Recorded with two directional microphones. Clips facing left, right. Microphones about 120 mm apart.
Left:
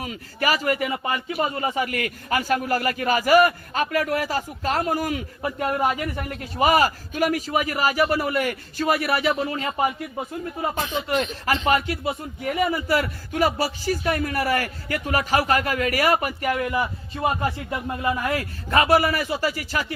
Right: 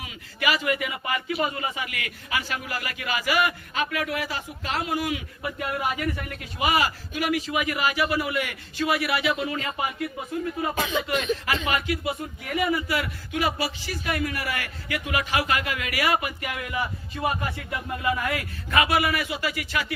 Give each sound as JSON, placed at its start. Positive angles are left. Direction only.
{"t": 0.0, "sound": "a man's voice", "side_deg": 40}
{"t": 10.8, "sound": "speech", "side_deg": -90}
{"t": 11.4, "sound": "a man's voice", "side_deg": 35}